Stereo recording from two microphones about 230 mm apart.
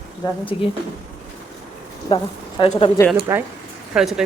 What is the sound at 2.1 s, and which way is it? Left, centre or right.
Speech, left.